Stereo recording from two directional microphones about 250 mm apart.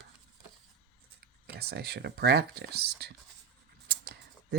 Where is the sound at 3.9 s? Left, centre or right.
Right.